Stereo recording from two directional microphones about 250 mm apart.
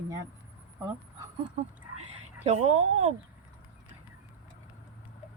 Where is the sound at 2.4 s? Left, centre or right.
Right.